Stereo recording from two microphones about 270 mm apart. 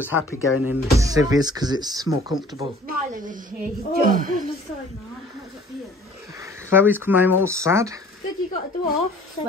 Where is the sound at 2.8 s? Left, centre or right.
Right.